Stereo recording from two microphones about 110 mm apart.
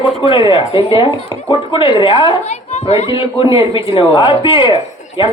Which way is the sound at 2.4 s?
80° left.